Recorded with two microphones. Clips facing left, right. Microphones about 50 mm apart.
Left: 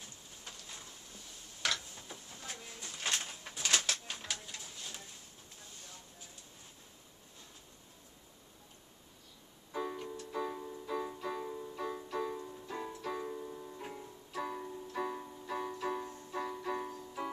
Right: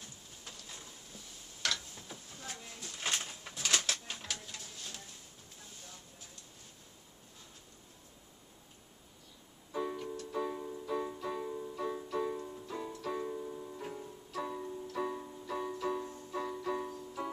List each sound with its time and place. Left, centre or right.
0.7 s a sound: centre
3.0 s bird: centre
4.1 s a sound: centre
9.7 s music: centre
12.6 s keyboard: centre
12.9 s music: centre